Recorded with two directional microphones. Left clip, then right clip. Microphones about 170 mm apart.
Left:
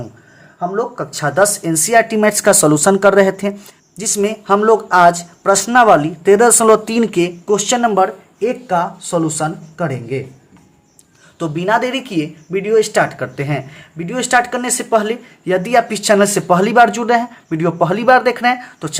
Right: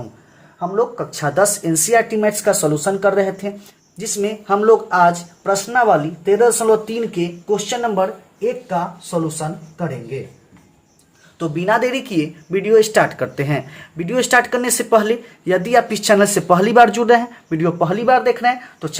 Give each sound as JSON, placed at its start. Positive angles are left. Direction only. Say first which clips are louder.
{"t": 0.8, "sound": "speech", "louder": "right 2 dB", "side_deg": 5}
{"t": 2.1, "sound": "speech", "louder": "left 4 dB", "side_deg": 25}
{"t": 8.7, "sound": "speech", "louder": "left 5 dB", "side_deg": 65}
{"t": 11.3, "sound": "speech", "louder": "left 1 dB", "side_deg": 20}
{"t": 11.6, "sound": "speech", "louder": "left 1 dB", "side_deg": 0}
{"t": 17.6, "sound": "speech", "louder": "left 3 dB", "side_deg": 10}